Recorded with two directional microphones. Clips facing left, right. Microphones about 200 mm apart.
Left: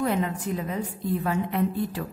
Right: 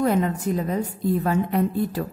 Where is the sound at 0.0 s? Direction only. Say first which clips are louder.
Right 4 dB; 45° right (ahead or behind).